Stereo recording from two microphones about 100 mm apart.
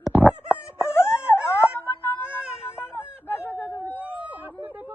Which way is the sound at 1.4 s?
25° left (ahead or behind).